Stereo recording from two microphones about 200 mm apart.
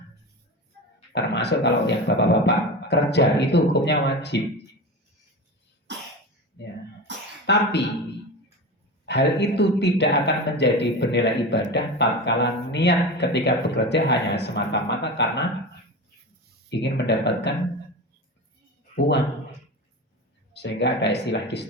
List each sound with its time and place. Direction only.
1.1 s speech: 60° left (ahead or behind)
5.9 s cough: 60° right (ahead or behind)
7.4 s speech: 60° left (ahead or behind)
9.0 s speech: 60° left (ahead or behind)
16.6 s speech: 60° left (ahead or behind)
18.9 s speech: 60° left (ahead or behind)
20.5 s speech: 60° left (ahead or behind)